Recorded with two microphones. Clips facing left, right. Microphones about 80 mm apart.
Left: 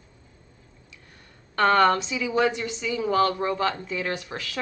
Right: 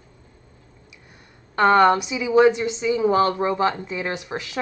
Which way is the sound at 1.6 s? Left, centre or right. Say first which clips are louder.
Right 4 dB; centre.